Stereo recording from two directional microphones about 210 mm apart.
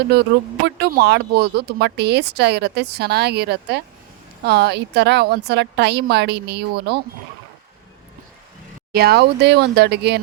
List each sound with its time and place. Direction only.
0.1 s speech: 50° right (ahead or behind)
8.9 s speech: 50° right (ahead or behind)